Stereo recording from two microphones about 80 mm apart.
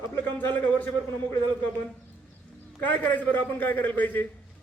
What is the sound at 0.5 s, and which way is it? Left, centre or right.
Speech, left.